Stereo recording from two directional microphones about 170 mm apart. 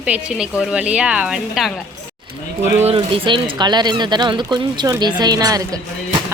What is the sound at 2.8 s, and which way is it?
A woman's voice, 30° right (ahead or behind).